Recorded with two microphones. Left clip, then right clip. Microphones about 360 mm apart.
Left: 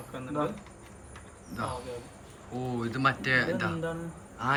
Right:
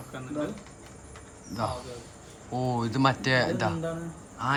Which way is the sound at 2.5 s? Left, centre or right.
Centre.